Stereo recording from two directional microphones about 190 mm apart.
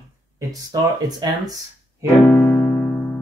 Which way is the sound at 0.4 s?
20° right (ahead or behind).